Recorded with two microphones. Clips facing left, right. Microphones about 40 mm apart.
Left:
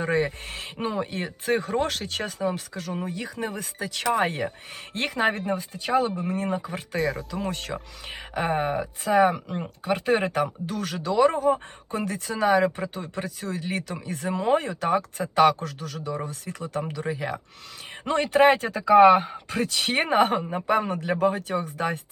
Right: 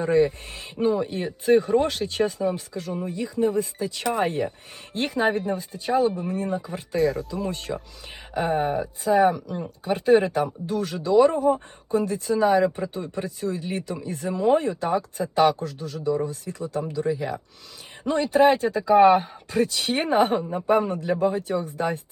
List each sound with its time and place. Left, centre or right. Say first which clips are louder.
0.0 s speech: right 4 dB; left
6.9 s speech: right 4 dB; centre
7.7 s speech: right 2 dB; left